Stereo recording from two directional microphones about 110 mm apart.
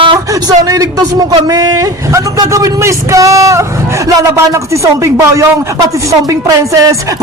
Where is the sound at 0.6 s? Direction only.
35° right (ahead or behind).